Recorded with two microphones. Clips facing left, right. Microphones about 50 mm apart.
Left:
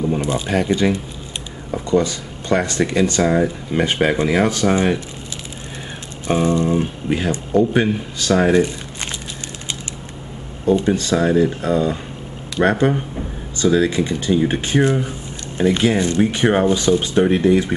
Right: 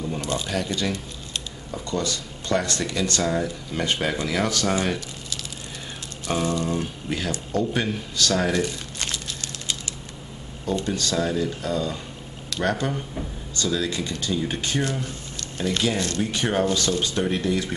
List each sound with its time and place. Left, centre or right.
0.0 s speech: left
6.2 s speech: left
10.6 s speech: left